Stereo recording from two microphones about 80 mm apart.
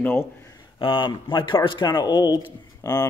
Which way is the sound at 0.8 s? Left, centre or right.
Left.